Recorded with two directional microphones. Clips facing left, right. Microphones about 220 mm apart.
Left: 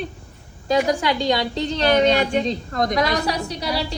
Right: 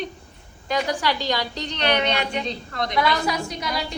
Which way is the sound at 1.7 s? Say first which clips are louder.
Left 6 dB; 40° left (ahead or behind).